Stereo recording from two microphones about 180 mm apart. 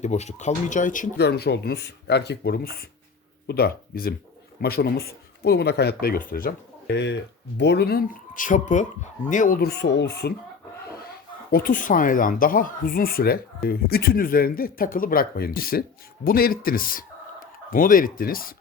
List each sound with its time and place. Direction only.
0.0 s speech: 40° left (ahead or behind)
1.2 s speech: 65° left (ahead or behind)
11.5 s speech: 50° left (ahead or behind)